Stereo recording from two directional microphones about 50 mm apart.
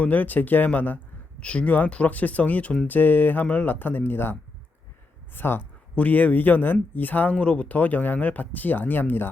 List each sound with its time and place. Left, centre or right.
0.0 s speech: left
1.4 s speech: left
5.9 s speech: left
7.3 s speech: left